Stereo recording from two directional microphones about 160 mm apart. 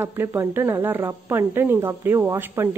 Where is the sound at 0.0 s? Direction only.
15° right (ahead or behind).